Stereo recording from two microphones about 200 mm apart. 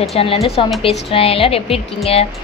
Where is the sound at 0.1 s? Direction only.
30° left (ahead or behind).